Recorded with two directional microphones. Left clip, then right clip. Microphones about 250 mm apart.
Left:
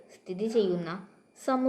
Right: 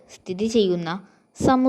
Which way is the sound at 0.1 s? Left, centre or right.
Right.